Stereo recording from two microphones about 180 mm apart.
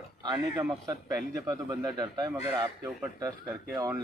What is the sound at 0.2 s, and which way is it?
A man's voice, 25° right (ahead or behind).